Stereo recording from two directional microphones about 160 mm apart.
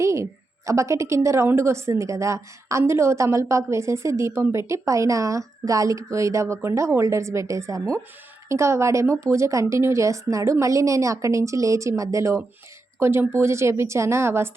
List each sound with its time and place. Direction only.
0.0 s a woman's voice: 20° right (ahead or behind)